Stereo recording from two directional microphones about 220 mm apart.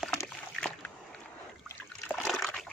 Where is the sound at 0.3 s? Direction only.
5° left (ahead or behind).